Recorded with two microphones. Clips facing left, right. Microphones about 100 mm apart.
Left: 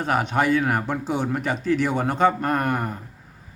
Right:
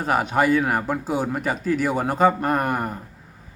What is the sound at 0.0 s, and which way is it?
Speech, 5° right (ahead or behind).